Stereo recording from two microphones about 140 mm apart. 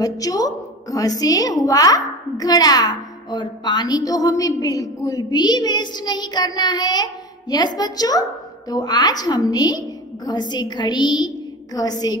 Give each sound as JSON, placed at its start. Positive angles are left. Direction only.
{"t": 0.0, "sound": "a woman's voice", "side_deg": 25}